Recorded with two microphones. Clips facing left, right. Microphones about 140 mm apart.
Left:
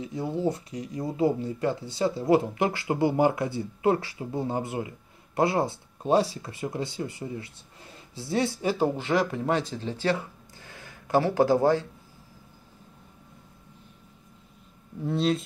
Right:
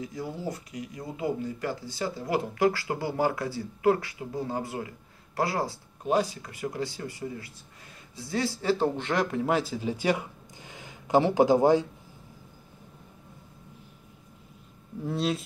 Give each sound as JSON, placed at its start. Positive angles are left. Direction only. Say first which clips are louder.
{"t": 0.0, "sound": "speech", "louder": "left 6 dB", "side_deg": 25}
{"t": 8.6, "sound": "speech", "louder": "left 1 dB", "side_deg": 10}
{"t": 15.0, "sound": "speech", "louder": "left 3 dB", "side_deg": 0}